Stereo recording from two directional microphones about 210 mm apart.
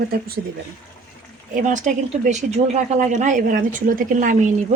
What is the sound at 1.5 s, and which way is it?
Speech, 35° right (ahead or behind).